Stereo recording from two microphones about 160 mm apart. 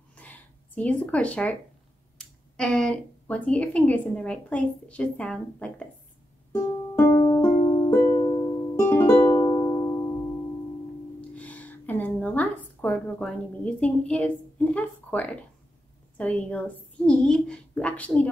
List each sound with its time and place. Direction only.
0.1 s a sound: 10° left (ahead or behind)
2.1 s speech: 5° left (ahead or behind)
6.5 s music: 15° left (ahead or behind)
9.4 s music: 25° left (ahead or behind)
11.1 s a sound: 10° left (ahead or behind)
16.2 s speech: 10° left (ahead or behind)